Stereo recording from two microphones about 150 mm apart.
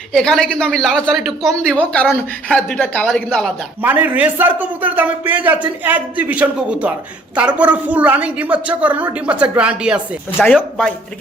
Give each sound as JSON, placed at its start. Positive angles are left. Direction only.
{"t": 0.1, "sound": "a woman's voice", "side_deg": 5}
{"t": 3.8, "sound": "a man's voice", "side_deg": -10}